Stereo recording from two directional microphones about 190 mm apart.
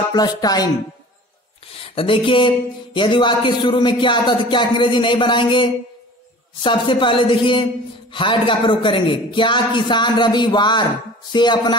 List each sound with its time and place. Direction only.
0.1 s speech: 20° left (ahead or behind)
2.0 s speech: 25° left (ahead or behind)